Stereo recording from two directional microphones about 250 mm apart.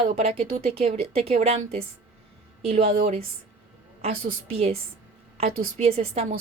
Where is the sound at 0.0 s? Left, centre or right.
Right.